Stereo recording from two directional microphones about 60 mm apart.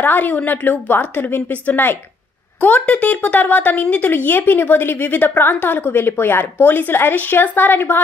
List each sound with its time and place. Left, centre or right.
0.0 s a woman's voice: left